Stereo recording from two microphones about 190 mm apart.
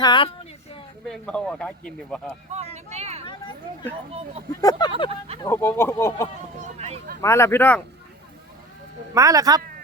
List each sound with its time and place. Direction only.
0.0 s speech: 25° left (ahead or behind)
1.0 s a man's voice: 5° left (ahead or behind)
2.7 s speech: 35° right (ahead or behind)
4.6 s speech: 20° left (ahead or behind)
6.6 s a sound: 35° right (ahead or behind)
7.2 s speech: 15° left (ahead or behind)
9.1 s speech: 20° right (ahead or behind)